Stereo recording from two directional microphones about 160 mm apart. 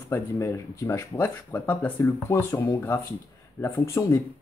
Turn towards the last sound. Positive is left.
turn(degrees=15)  # may be behind; listen again after turning